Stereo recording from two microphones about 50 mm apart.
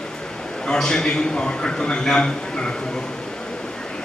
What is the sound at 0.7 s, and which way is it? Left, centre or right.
A man's voice, centre.